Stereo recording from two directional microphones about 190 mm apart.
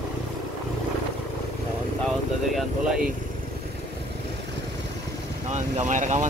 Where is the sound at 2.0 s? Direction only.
Centre (ahead or behind).